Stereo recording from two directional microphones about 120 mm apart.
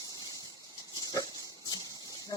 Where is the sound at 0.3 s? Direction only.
30° left (ahead or behind).